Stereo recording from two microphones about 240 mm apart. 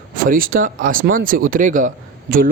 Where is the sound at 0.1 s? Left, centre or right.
Right.